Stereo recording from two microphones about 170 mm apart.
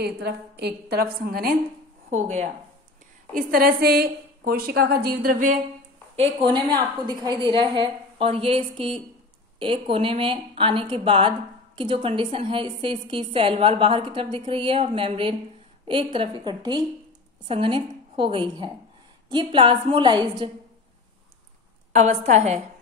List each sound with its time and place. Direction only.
0.0 s a woman's voice: 70° right (ahead or behind)
2.0 s a woman's voice: 45° right (ahead or behind)
3.3 s a woman's voice: 60° right (ahead or behind)
6.1 s a woman's voice: 30° right (ahead or behind)
21.9 s a woman's voice: 45° right (ahead or behind)